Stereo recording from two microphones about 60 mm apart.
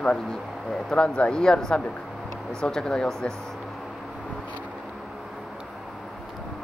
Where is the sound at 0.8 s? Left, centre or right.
Centre.